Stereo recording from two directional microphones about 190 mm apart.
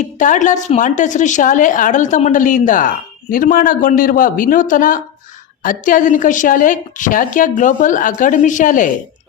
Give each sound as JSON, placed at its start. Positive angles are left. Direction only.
{"t": 0.0, "sound": "a woman's voice", "side_deg": 40}